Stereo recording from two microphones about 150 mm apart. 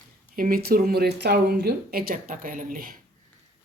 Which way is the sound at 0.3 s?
70° right (ahead or behind).